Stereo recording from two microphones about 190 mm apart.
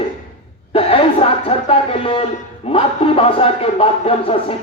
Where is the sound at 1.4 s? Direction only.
30° left (ahead or behind).